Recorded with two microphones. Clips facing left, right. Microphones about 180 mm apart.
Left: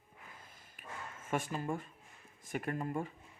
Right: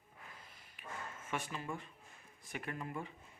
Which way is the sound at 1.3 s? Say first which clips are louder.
Left 6 dB; 45° left (ahead or behind).